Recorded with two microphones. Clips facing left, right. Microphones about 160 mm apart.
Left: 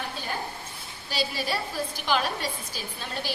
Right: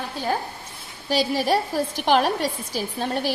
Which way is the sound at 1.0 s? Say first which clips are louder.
Right 8 dB; 85° right.